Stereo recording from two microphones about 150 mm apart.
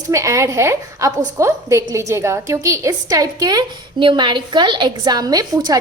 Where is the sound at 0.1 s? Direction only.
20° right (ahead or behind).